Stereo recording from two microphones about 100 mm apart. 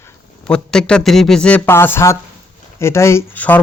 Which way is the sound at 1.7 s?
25° left (ahead or behind).